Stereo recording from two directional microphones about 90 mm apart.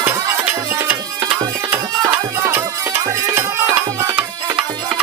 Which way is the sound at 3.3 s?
25° right (ahead or behind).